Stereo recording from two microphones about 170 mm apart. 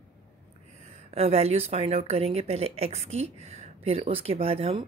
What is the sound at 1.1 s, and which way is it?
A woman's voice, 35° right (ahead or behind).